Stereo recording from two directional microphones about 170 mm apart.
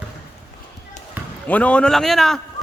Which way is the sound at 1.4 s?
10° left (ahead or behind).